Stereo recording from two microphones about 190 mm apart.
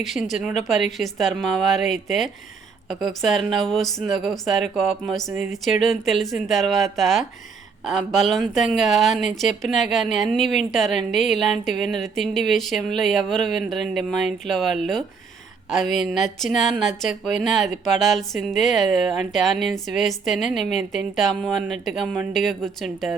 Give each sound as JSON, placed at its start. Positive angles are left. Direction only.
{"t": 0.0, "sound": "speech", "side_deg": 0}
{"t": 16.1, "sound": "speech", "side_deg": 0}